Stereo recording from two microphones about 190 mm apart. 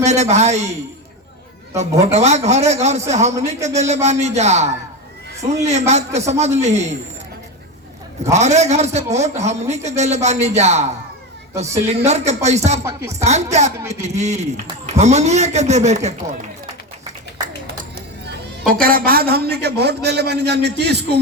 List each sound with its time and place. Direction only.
0.0 s a man's voice: 35° right (ahead or behind)
8.2 s a man's voice: 35° right (ahead or behind)
18.7 s a man's voice: 50° right (ahead or behind)